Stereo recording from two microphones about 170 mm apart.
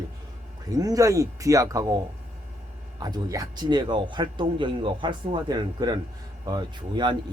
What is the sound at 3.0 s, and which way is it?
Speech, 20° right (ahead or behind).